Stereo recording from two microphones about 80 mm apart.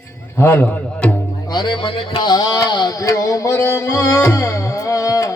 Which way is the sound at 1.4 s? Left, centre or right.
Left.